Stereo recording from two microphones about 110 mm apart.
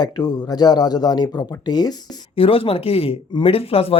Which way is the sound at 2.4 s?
60° left (ahead or behind).